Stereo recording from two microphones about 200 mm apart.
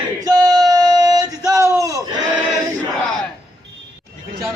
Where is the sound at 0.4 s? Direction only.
20° right (ahead or behind).